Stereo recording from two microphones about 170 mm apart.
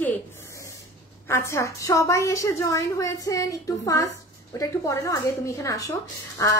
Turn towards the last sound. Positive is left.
turn(degrees=15)  # may be behind; listen again after turning